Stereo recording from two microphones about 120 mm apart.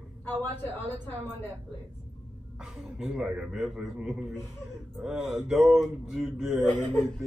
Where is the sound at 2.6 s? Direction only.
5° right (ahead or behind).